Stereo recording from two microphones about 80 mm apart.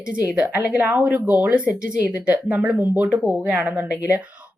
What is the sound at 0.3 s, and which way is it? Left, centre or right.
Speech, centre.